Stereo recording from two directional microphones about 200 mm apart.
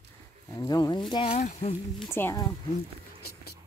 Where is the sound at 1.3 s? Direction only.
35° left (ahead or behind).